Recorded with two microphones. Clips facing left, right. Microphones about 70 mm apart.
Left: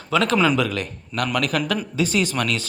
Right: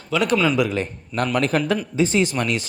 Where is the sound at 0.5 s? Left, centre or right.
Centre.